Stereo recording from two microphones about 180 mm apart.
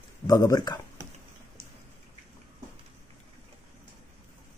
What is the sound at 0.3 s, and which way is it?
Speech, 20° left (ahead or behind).